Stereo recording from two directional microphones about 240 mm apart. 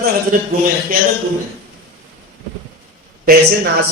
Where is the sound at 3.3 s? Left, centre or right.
Right.